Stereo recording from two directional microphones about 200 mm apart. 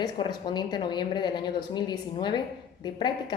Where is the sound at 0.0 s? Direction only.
20° left (ahead or behind).